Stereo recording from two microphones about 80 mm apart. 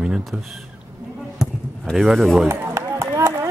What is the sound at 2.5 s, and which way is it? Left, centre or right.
Run, right.